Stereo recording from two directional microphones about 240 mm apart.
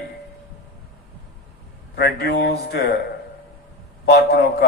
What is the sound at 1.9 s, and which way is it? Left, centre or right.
Speech, left.